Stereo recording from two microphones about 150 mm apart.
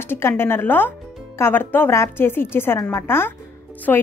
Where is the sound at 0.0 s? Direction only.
15° left (ahead or behind).